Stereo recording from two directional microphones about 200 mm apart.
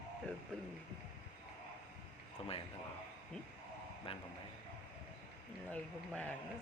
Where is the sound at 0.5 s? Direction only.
5° left (ahead or behind).